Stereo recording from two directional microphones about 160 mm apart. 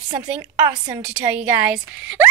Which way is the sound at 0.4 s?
20° right (ahead or behind).